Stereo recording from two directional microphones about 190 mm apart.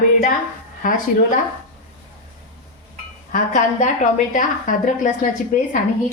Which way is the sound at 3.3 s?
40° left (ahead or behind).